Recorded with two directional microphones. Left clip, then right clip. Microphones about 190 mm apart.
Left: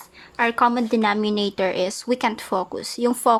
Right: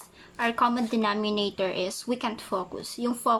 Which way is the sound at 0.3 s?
25° left (ahead or behind).